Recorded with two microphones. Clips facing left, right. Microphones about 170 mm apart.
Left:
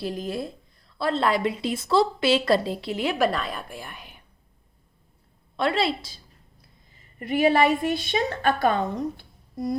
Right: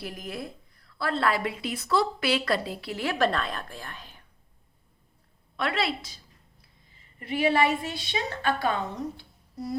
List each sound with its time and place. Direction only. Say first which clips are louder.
0.0 s a woman's voice: left 7 dB; 30° left (ahead or behind)
3.2 s a woman's voice: left 2 dB; 5° left (ahead or behind)
5.5 s a woman's voice: left 5 dB; 30° left (ahead or behind)
7.2 s a woman's voice: left 4 dB; 45° left (ahead or behind)